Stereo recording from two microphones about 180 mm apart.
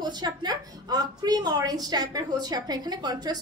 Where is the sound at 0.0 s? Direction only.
25° right (ahead or behind).